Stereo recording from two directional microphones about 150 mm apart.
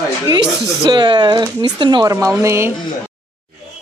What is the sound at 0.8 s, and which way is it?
Speech, 30° right (ahead or behind).